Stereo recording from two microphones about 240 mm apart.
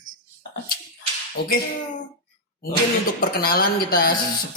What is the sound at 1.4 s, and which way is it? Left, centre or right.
Speech, left.